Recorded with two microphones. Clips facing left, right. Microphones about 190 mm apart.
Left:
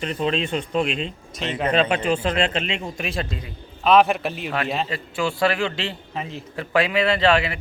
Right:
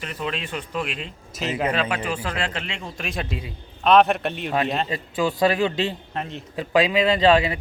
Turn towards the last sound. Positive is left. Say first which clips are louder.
# right 2 dB
turn(degrees=-20)  # may be behind; listen again after turning